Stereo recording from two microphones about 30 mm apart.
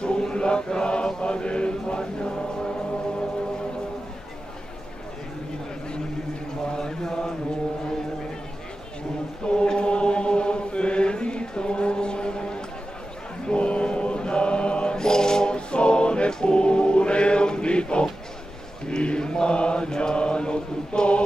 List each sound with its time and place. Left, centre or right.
0.2 s mantra: left
6.7 s mantra: left
9.5 s chant: left
13.5 s chant: left
15.0 s a sound: left
16.3 s chant: left
18.9 s mantra: left